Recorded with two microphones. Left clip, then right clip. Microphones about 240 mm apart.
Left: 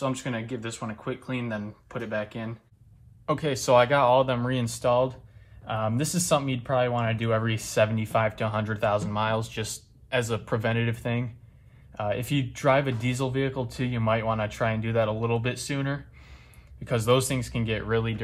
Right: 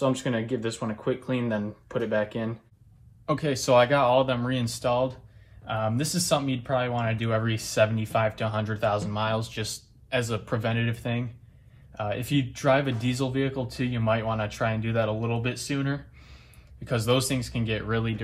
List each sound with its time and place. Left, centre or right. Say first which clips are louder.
0.3 s speech: right 4 dB; centre
0.6 s speech: right 4 dB; left
3.3 s speech: left 1 dB; left
16.8 s speech: left 2 dB; left